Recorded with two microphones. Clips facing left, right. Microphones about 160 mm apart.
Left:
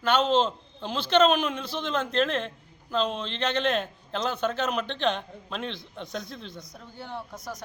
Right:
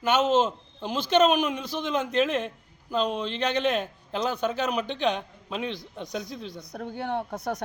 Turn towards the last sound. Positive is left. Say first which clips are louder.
# right 7 dB
turn(degrees=-65)  # may be behind; listen again after turning